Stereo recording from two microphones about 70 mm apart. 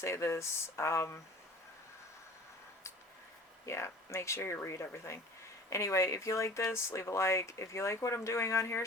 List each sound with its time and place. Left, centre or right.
0.0 s speech: left
3.7 s speech: left